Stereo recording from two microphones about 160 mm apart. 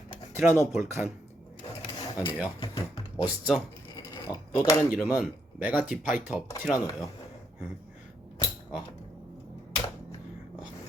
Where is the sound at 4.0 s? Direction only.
25° left (ahead or behind).